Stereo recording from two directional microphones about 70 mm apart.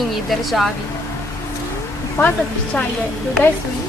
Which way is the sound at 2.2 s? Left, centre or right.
Left.